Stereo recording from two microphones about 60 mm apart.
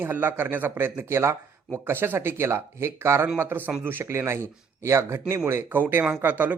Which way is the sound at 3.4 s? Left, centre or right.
Right.